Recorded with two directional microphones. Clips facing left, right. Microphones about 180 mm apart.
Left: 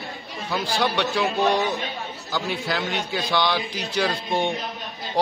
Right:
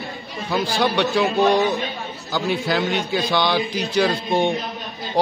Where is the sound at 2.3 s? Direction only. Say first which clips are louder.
Right 5 dB; 20° right (ahead or behind).